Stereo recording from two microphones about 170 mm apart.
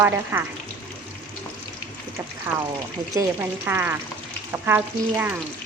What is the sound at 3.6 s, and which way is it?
Speech, 10° right (ahead or behind).